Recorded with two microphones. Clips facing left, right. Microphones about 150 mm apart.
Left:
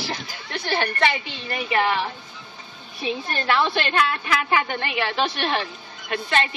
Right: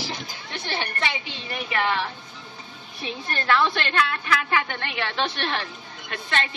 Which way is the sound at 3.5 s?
25° left (ahead or behind).